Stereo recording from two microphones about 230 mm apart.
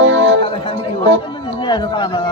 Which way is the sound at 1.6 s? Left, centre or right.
Centre.